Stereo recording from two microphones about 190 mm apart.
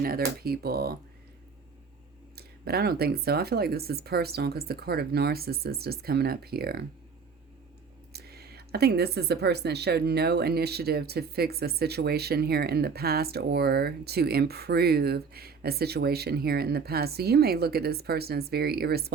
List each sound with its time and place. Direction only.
0.0 s speech: 50° right (ahead or behind)
2.3 s speech: 55° right (ahead or behind)
8.1 s speech: 55° right (ahead or behind)